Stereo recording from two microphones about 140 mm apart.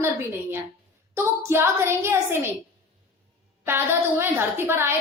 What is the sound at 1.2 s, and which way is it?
A woman's voice, 20° right (ahead or behind).